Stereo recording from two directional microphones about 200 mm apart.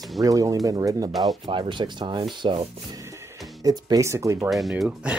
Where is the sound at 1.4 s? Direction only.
25° right (ahead or behind).